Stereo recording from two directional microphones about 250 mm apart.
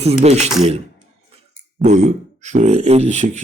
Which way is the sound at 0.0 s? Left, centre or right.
Right.